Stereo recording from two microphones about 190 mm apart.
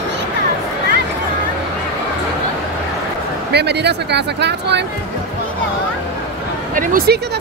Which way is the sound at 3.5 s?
60° right (ahead or behind).